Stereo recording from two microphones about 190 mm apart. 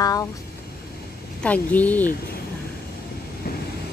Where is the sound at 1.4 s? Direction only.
10° left (ahead or behind).